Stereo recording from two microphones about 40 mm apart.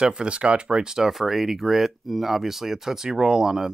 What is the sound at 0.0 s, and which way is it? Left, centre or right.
Speech, right.